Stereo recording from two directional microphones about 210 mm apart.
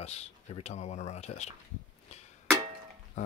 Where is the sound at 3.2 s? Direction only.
35° left (ahead or behind).